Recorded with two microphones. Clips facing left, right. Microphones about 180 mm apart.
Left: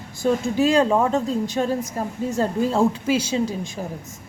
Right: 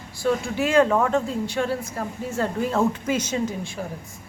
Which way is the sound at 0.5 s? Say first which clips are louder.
Left 3 dB; 35° left (ahead or behind).